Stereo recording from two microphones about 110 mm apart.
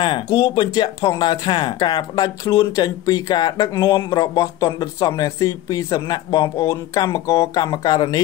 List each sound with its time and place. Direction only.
0.0 s speech: 45° left (ahead or behind)